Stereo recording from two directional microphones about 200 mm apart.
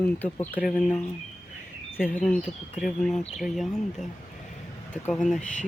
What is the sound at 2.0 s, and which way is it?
Speech, 45° left (ahead or behind).